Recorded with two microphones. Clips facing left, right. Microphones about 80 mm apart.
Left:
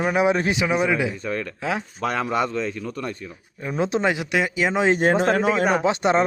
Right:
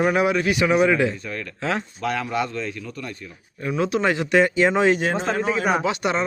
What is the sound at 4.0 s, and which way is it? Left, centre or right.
Speech, centre.